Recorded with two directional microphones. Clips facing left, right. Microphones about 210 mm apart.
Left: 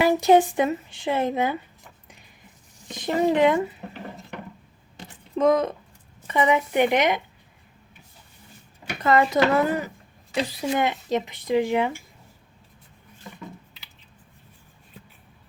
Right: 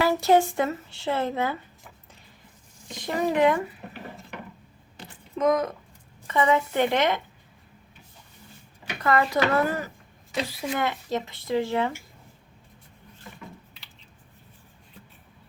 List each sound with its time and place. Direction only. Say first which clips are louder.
0.0 s speech: left 3 dB; 20° left (ahead or behind)
2.9 s speech: left 4 dB; 20° left (ahead or behind)
5.4 s speech: left 3 dB; 30° left (ahead or behind)
6.2 s speech: left 1 dB; 15° left (ahead or behind)
9.0 s speech: left 3 dB; 20° left (ahead or behind)